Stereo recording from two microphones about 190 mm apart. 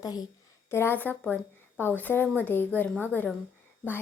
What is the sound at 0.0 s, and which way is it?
A woman's voice, 20° left (ahead or behind).